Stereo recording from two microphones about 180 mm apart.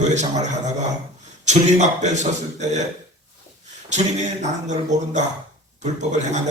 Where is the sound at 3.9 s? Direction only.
40° right (ahead or behind).